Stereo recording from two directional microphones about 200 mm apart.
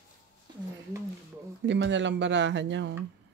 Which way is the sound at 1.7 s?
65° right (ahead or behind).